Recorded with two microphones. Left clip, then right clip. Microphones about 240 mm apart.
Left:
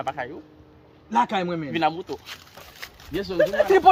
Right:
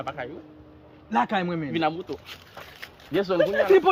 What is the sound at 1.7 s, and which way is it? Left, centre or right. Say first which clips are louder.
Speech: left 3 dB; centre.